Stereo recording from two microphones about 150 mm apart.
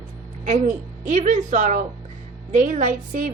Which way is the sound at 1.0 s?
55° right (ahead or behind).